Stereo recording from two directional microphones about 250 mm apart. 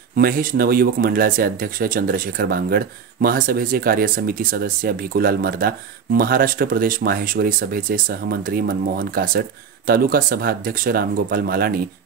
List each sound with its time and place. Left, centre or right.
0.1 s speech: right